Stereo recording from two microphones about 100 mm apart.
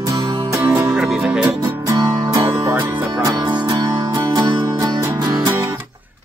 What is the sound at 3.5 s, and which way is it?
Music, 50° right (ahead or behind).